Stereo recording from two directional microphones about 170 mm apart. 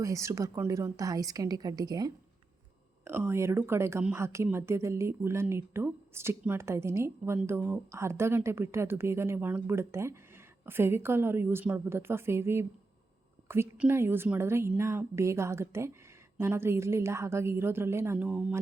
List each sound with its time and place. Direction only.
0.0 s a woman's voice: 20° right (ahead or behind)